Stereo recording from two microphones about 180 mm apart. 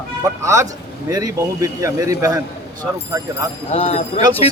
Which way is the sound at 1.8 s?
20° right (ahead or behind).